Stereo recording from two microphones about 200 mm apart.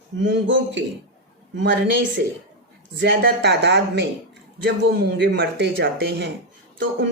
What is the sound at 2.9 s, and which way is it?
Speech, 55° right (ahead or behind).